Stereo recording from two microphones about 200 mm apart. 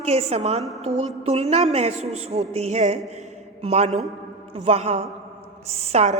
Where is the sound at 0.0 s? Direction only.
30° right (ahead or behind).